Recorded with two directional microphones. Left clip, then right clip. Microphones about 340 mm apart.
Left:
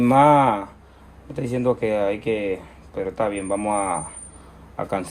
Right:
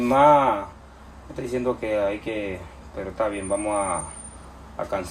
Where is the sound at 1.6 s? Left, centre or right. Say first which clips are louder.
Left 3 dB; left.